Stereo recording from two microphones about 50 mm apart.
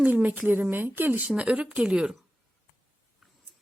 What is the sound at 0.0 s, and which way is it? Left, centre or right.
Speech, right.